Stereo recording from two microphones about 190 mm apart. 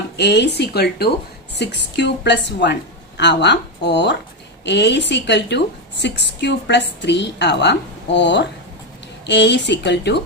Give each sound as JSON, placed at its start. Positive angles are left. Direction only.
{"t": 0.2, "sound": "a woman's voice", "side_deg": 65}